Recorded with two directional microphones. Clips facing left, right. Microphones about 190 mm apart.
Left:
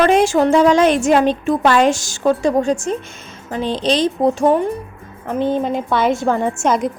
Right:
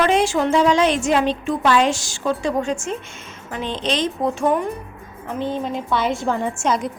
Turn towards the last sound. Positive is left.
turn(degrees=50)  # may be behind; listen again after turning